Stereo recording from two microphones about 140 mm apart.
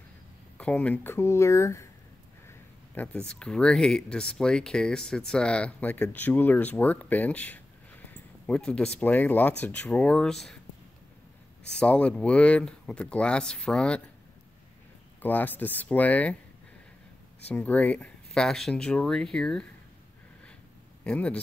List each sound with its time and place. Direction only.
0.6 s speech: 10° left (ahead or behind)
2.9 s speech: 10° left (ahead or behind)
11.8 s speech: 10° left (ahead or behind)
15.2 s speech: 15° left (ahead or behind)
17.5 s speech: 10° left (ahead or behind)
21.0 s speech: 10° left (ahead or behind)